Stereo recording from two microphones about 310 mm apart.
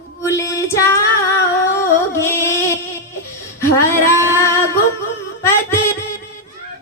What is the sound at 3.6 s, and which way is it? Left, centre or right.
Female singing, centre.